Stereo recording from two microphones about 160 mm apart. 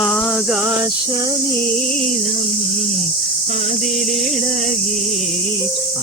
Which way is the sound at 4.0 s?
50° right (ahead or behind).